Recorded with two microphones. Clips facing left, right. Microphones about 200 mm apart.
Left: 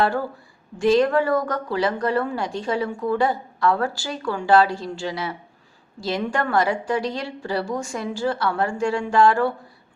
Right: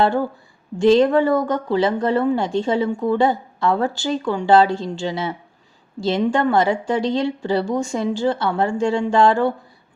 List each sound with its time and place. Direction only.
0.0 s a woman's voice: 25° right (ahead or behind)